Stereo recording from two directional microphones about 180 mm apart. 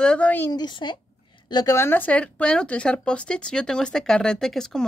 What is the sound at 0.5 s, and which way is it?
Speech, 25° left (ahead or behind).